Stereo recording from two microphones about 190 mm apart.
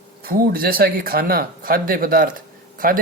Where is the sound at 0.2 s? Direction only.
50° right (ahead or behind).